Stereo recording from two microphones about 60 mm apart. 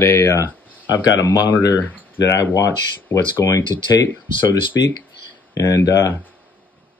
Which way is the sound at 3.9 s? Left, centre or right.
Left.